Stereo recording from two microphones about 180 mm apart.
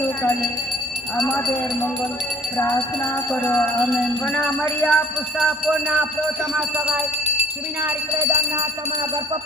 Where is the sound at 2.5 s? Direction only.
15° left (ahead or behind).